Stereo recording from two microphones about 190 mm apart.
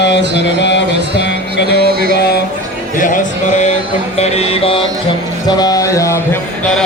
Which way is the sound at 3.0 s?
45° left (ahead or behind).